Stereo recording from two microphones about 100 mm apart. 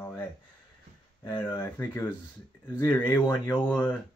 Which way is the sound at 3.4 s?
20° left (ahead or behind).